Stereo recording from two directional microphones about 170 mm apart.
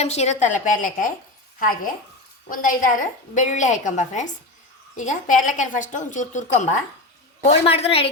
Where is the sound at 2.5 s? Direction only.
50° left (ahead or behind).